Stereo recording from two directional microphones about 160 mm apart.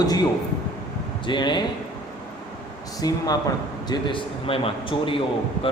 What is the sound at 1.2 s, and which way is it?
Speech, 30° left (ahead or behind).